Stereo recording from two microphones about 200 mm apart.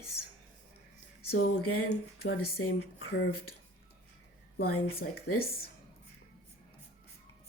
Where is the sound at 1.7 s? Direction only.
90° left.